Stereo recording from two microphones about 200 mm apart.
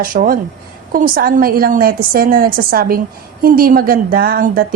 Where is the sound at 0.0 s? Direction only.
45° right (ahead or behind).